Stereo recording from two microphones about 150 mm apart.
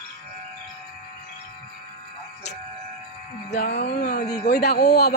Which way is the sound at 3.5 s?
90° left.